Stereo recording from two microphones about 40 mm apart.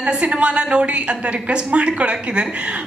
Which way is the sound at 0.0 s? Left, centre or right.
Right.